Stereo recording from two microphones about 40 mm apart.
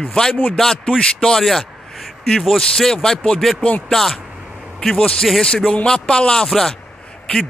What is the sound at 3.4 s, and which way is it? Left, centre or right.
Speech, centre.